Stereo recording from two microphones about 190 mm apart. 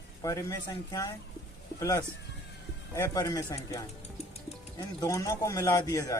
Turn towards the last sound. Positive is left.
turn(degrees=15)  # may be behind; listen again after turning